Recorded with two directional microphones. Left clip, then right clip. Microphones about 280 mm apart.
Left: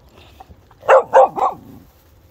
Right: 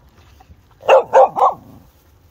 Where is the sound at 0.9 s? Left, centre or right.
Right.